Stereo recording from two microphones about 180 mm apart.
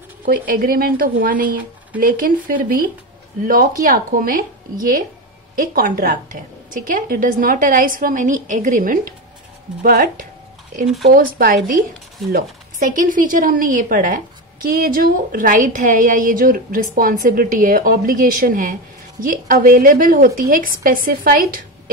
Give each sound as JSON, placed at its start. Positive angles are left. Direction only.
{"t": 0.2, "sound": "speech", "side_deg": -50}
{"t": 5.8, "sound": "speech", "side_deg": -50}